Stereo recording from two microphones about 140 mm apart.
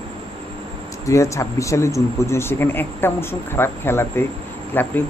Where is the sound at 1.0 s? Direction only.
20° left (ahead or behind).